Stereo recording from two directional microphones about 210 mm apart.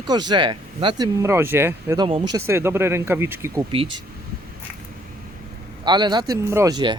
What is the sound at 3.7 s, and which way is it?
Speech, 25° right (ahead or behind).